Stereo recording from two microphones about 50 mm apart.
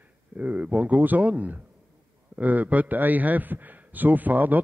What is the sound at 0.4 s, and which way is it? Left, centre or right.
A man's voice, right.